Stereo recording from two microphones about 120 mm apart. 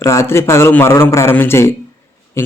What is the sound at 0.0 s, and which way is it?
A man's voice, 25° left (ahead or behind).